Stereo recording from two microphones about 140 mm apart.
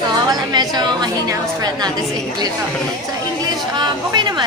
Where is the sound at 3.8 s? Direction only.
30° right (ahead or behind).